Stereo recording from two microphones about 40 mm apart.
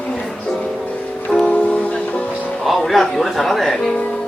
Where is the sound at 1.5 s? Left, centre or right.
Left.